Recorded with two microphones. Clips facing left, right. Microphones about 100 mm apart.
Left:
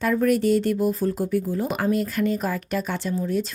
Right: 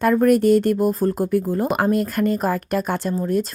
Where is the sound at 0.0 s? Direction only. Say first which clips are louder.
Right 5 dB; 50° right (ahead or behind).